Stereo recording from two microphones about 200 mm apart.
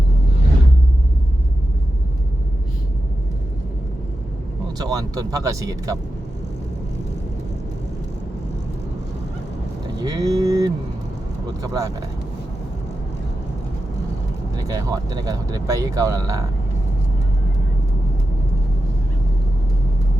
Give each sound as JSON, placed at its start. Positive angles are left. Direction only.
{"t": 4.8, "sound": "speech", "side_deg": -20}
{"t": 9.8, "sound": "a sound", "side_deg": -20}
{"t": 11.6, "sound": "speech", "side_deg": -20}
{"t": 14.5, "sound": "speech", "side_deg": -20}